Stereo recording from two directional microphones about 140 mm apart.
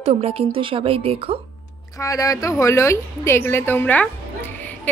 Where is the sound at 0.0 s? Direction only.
45° right (ahead or behind).